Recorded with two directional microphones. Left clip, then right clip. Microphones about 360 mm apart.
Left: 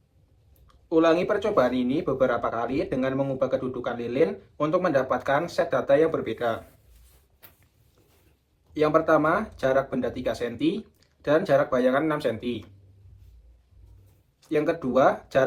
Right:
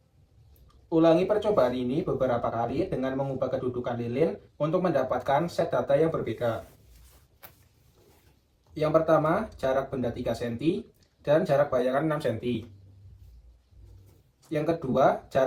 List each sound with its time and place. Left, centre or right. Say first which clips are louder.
0.9 s speech: left 1 dB; left
8.7 s speech: left 2 dB; left
14.5 s speech: left 4 dB; left